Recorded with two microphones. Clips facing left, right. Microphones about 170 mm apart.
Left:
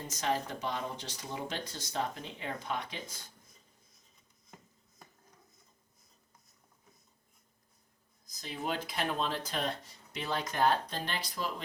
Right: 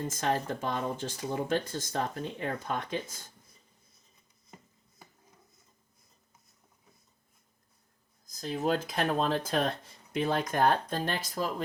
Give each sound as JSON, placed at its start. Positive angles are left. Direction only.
{"t": 0.1, "sound": "speech", "side_deg": -50}
{"t": 8.4, "sound": "speech", "side_deg": -45}